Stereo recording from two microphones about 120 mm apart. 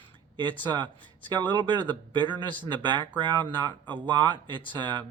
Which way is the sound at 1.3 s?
40° right (ahead or behind).